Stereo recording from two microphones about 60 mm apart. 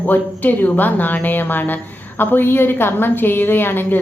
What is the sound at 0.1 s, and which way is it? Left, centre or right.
A woman's voice, left.